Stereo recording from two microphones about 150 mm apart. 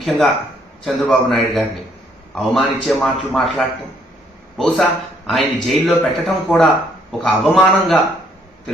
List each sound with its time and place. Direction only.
0.0 s a man's voice: centre (ahead or behind)